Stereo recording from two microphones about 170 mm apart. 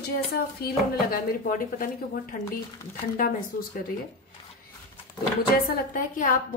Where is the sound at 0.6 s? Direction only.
65° left (ahead or behind).